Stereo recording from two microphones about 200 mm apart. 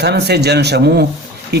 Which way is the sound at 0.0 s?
55° right (ahead or behind).